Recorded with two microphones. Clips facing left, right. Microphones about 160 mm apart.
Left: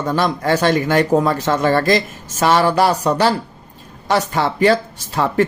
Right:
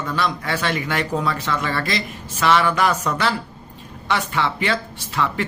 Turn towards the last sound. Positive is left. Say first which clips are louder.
# left 6 dB
turn(degrees=40)  # may be behind; listen again after turning